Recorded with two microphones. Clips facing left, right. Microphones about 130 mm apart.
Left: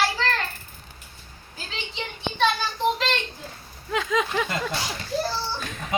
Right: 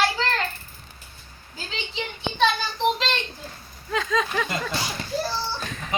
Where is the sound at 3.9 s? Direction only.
15° left (ahead or behind).